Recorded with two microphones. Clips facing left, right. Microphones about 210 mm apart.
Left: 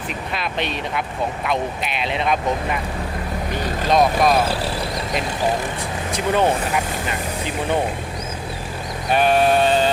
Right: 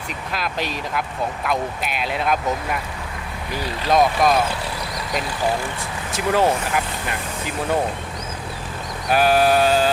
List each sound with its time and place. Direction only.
0.3 s speech: centre (ahead or behind)
4.2 s speech: centre (ahead or behind)
4.4 s speech: 35° left (ahead or behind)
6.1 s speech: centre (ahead or behind)
9.0 s speech: 5° right (ahead or behind)